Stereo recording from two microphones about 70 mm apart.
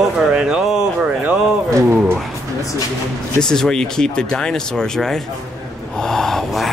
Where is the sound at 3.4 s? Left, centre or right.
Centre.